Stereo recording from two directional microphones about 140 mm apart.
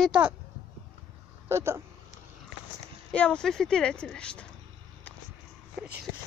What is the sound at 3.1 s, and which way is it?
Speech, 10° left (ahead or behind).